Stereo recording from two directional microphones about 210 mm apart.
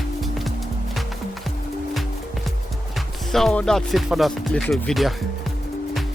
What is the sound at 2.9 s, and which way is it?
Speech, centre (ahead or behind).